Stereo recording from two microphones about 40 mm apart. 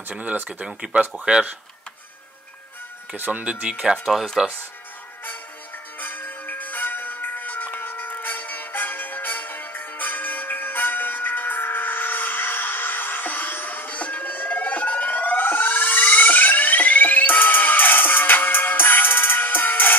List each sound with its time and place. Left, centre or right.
0.1 s speech: right
0.7 s speech: right
3.2 s speech: right
3.9 s speech: centre
5.9 s bell: left